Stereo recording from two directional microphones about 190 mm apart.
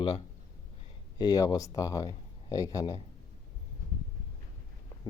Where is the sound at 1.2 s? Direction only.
20° left (ahead or behind).